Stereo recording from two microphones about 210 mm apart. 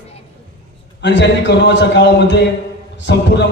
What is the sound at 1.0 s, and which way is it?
A man's voice, 55° left (ahead or behind).